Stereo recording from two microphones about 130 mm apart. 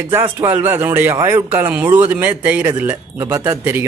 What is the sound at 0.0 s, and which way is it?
Speech, 15° right (ahead or behind).